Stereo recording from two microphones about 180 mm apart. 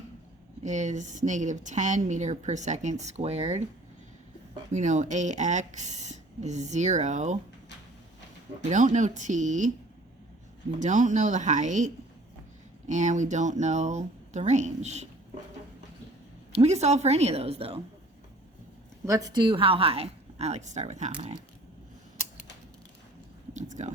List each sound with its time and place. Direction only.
0.6 s a woman's voice: 40° right (ahead or behind)
4.7 s a woman's voice: 45° right (ahead or behind)
8.7 s speech: 45° right (ahead or behind)
10.8 s speech: 45° right (ahead or behind)
12.9 s a woman's voice: 40° right (ahead or behind)
16.5 s a woman's voice: 35° right (ahead or behind)
19.0 s a woman's voice: 20° right (ahead or behind); by 21.3 s 40° right (ahead or behind)
23.6 s speech: 40° right (ahead or behind)